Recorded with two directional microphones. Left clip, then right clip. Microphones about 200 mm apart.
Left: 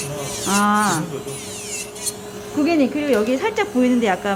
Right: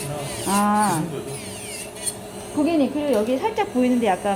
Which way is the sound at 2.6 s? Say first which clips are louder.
Left 2 dB; 25° left (ahead or behind).